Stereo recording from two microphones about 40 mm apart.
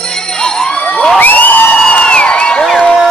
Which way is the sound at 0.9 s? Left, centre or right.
Left.